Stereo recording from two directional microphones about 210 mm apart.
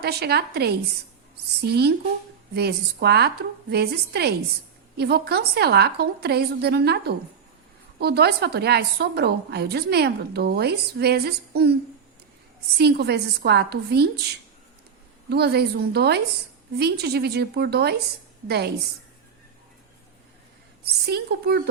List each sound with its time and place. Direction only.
0.0 s a woman's voice: 50° right (ahead or behind)
12.7 s a woman's voice: 50° right (ahead or behind)
15.3 s a woman's voice: 50° right (ahead or behind)
20.8 s a woman's voice: 50° right (ahead or behind)